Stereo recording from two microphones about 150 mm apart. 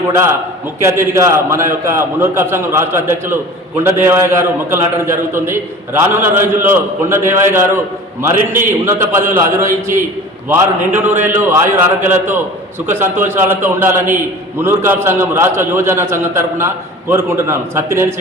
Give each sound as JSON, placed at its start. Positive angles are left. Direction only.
{"t": 0.8, "sound": "a man's voice", "side_deg": -15}